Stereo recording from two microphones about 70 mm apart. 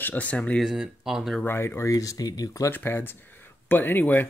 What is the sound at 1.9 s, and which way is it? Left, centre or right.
Speech, left.